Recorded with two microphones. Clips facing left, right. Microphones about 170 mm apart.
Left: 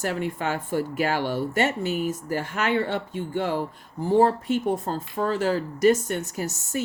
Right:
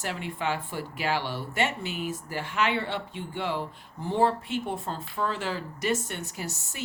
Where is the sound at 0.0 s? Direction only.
45° left (ahead or behind).